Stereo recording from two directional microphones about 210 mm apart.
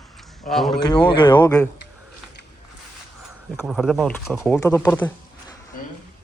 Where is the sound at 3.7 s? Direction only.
Centre (ahead or behind).